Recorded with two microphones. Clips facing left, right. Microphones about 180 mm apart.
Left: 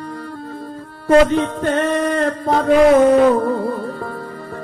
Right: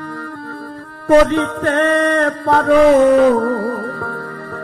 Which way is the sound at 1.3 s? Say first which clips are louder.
Right 1 dB; 70° right (ahead or behind).